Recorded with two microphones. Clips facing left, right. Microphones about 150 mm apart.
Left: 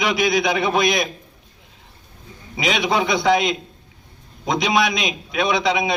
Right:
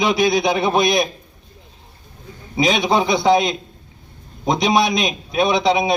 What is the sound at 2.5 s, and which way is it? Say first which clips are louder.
Speech: right 3 dB; 30° right (ahead or behind).